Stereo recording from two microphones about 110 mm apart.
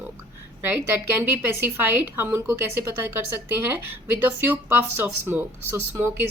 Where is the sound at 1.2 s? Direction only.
15° right (ahead or behind).